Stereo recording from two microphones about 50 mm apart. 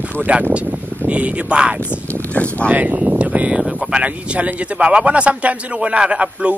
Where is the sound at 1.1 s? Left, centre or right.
Right.